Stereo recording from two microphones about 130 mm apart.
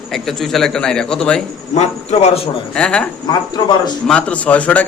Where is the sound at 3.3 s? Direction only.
30° left (ahead or behind).